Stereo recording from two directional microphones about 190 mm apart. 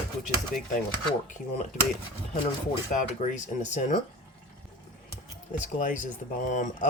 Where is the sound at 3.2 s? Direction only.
40° left (ahead or behind).